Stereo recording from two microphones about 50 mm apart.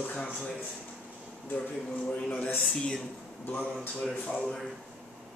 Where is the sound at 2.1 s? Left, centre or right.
Left.